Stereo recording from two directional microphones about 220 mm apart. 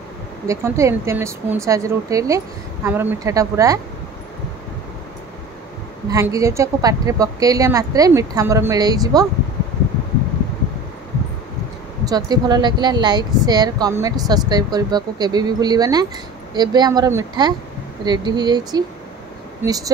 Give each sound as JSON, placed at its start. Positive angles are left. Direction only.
{"t": 0.5, "sound": "speech", "side_deg": -15}
{"t": 6.0, "sound": "speech", "side_deg": -15}
{"t": 12.0, "sound": "speech", "side_deg": -15}